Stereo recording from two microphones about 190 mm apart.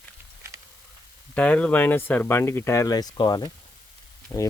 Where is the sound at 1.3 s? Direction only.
5° left (ahead or behind).